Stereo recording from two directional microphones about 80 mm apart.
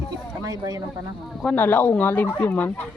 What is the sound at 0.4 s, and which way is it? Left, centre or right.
Speech, right.